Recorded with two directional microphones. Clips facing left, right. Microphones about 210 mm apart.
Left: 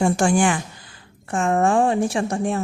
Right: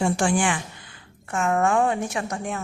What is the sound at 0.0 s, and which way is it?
Speech, 45° left (ahead or behind).